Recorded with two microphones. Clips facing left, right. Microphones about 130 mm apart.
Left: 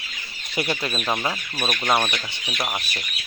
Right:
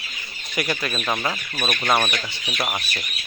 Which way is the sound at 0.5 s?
25° left (ahead or behind).